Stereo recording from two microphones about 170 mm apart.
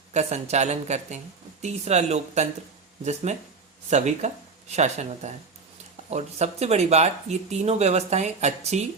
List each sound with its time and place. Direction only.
0.1 s speech: 40° right (ahead or behind)